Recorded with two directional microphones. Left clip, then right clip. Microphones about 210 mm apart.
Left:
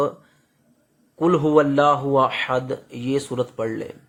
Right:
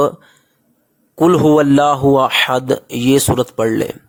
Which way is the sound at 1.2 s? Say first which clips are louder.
Right 6 dB; 55° right (ahead or behind).